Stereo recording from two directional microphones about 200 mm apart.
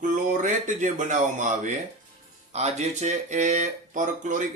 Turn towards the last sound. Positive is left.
turn(degrees=-40)  # may be behind; listen again after turning